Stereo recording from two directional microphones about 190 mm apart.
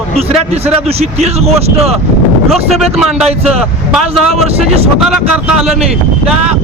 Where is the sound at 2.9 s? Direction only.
5° right (ahead or behind).